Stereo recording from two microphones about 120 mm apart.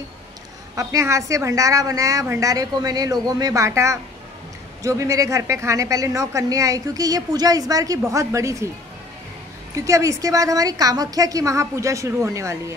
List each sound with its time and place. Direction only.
0.7 s a woman's voice: 25° right (ahead or behind)
9.8 s a woman's voice: 25° right (ahead or behind)